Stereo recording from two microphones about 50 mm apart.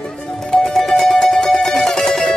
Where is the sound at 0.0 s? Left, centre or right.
Centre.